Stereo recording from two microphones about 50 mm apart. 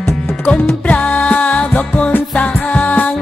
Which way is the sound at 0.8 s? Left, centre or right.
Left.